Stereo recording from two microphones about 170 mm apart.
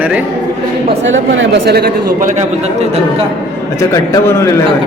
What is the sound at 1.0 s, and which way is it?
A man's voice, 90° right.